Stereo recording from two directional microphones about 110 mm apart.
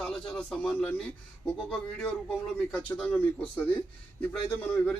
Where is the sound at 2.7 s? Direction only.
10° left (ahead or behind).